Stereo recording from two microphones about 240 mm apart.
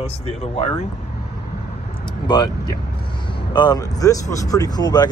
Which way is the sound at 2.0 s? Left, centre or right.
Centre.